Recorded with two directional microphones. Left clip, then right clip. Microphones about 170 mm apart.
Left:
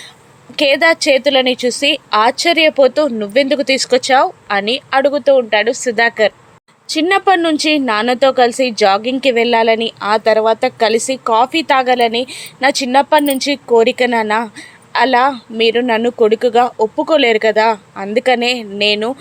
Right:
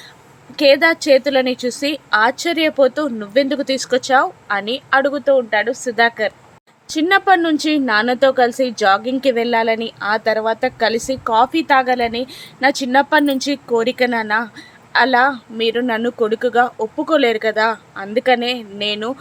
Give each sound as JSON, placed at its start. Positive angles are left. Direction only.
{"t": 0.5, "sound": "a woman's voice", "side_deg": 20}